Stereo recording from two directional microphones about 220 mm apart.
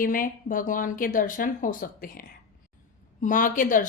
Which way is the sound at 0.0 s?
40° left (ahead or behind).